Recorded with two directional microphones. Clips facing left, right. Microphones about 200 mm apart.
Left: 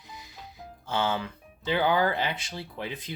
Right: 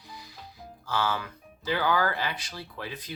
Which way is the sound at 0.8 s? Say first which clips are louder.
Left 1 dB; 25° left (ahead or behind).